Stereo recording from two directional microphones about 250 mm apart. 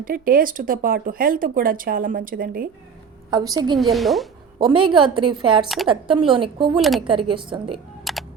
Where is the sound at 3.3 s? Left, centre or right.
Centre.